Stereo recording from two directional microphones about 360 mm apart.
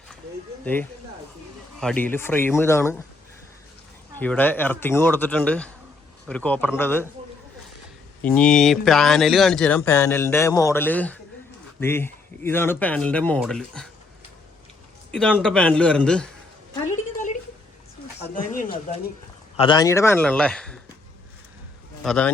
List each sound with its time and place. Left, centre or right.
0.6 s speech: centre
4.2 s speech: centre
8.2 s speech: centre
15.1 s speech: centre
18.3 s speech: left; by 20.7 s centre
22.0 s speech: centre